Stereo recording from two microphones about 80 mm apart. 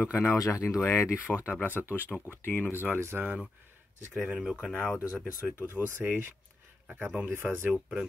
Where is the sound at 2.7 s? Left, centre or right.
Right.